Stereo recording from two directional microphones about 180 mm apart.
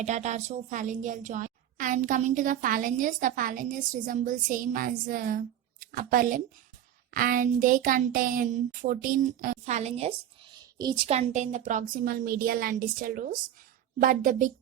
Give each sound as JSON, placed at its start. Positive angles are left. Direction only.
{"t": 0.0, "sound": "a woman's voice", "side_deg": -40}
{"t": 10.8, "sound": "a woman's voice", "side_deg": -25}